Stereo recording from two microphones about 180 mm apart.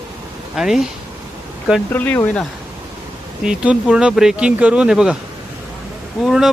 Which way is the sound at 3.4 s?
5° right (ahead or behind).